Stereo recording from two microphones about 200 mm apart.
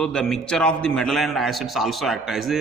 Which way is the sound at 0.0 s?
5° left (ahead or behind).